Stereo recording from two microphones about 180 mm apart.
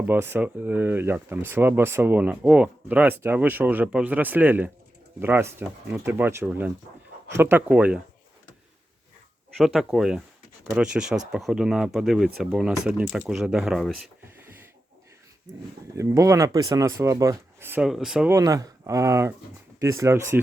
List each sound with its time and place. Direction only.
0.1 s speech: 10° right (ahead or behind)
9.6 s speech: centre (ahead or behind)
16.0 s speech: 15° right (ahead or behind)
18.3 s speech: 20° right (ahead or behind)